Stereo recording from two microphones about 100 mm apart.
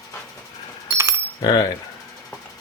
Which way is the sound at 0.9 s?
25° right (ahead or behind).